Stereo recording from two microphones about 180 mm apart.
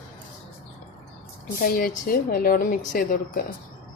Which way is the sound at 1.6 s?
50° left (ahead or behind).